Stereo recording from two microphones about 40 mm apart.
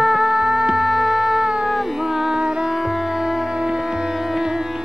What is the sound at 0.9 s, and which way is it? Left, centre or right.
Music, centre.